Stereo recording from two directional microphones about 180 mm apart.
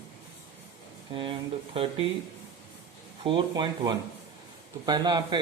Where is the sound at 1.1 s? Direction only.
30° right (ahead or behind).